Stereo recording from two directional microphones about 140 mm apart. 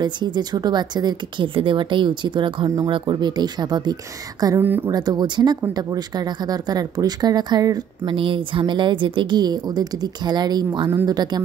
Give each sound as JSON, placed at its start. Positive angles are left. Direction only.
{"t": 0.0, "sound": "speech", "side_deg": -30}
{"t": 4.6, "sound": "speech", "side_deg": -15}
{"t": 4.9, "sound": "speech", "side_deg": -30}